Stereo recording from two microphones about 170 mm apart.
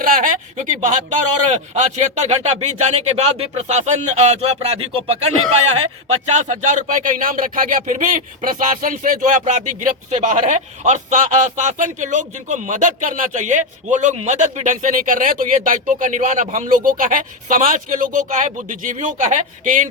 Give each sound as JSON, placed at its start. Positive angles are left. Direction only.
{"t": 0.0, "sound": "speech", "side_deg": -55}